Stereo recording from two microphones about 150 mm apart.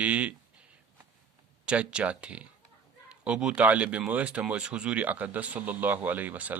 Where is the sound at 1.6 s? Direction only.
5° right (ahead or behind).